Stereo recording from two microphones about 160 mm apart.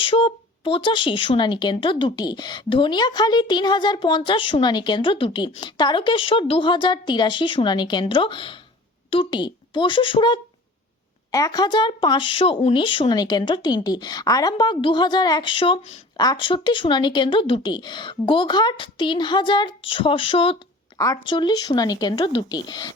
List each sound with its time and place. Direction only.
0.0 s speech: 35° left (ahead or behind)